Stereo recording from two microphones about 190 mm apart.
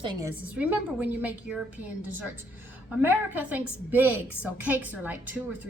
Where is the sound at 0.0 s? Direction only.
25° right (ahead or behind).